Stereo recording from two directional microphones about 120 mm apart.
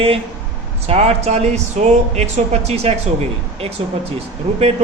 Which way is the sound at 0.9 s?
60° right (ahead or behind).